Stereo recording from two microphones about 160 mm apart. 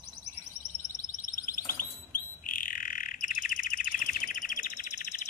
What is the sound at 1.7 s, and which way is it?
Bird, 60° left (ahead or behind).